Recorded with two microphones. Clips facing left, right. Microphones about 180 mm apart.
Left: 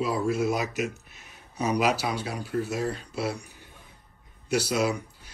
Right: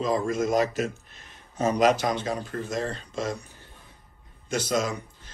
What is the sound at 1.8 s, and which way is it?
Speech, 5° left (ahead or behind).